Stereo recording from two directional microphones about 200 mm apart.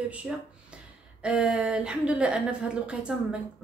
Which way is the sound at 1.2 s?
5° right (ahead or behind).